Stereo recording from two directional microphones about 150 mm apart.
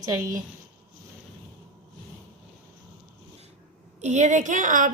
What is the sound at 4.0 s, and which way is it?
Speech, 50° right (ahead or behind).